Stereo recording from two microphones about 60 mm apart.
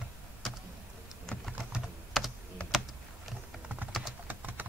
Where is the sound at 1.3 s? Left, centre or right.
Centre.